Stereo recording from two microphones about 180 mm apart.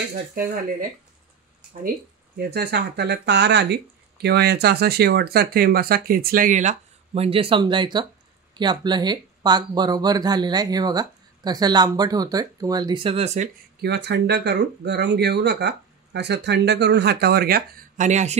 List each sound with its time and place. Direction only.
0.1 s speech: 50° right (ahead or behind)
2.3 s speech: 65° right (ahead or behind); by 13.5 s 40° right (ahead or behind)
13.7 s speech: 70° right (ahead or behind); by 18.4 s 40° right (ahead or behind)